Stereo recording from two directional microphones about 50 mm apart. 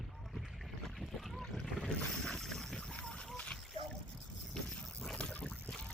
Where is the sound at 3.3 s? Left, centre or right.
Centre.